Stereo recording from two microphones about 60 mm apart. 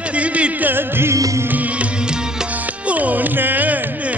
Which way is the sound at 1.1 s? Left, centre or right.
Right.